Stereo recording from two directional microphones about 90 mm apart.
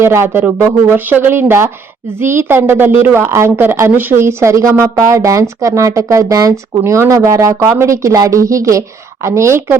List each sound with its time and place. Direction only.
0.0 s a woman's voice: 30° right (ahead or behind)